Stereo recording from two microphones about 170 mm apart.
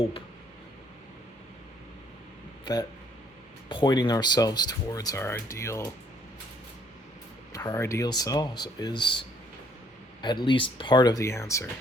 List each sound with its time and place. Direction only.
3.7 s speech: 25° left (ahead or behind)
7.5 s speech: 20° left (ahead or behind)